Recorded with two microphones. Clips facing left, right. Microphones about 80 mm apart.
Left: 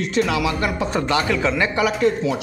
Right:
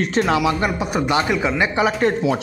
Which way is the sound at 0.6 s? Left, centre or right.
Centre.